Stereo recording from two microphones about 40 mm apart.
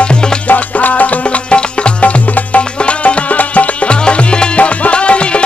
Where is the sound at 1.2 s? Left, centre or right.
Left.